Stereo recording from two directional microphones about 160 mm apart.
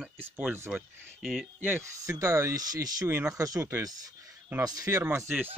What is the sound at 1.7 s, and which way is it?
Speech, 20° right (ahead or behind).